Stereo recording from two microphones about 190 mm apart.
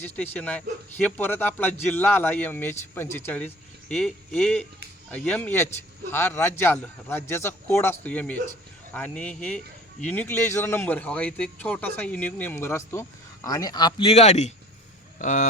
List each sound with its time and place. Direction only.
0.0 s a man's voice: 10° left (ahead or behind); by 14.5 s 35° left (ahead or behind)
15.2 s speech: 45° left (ahead or behind)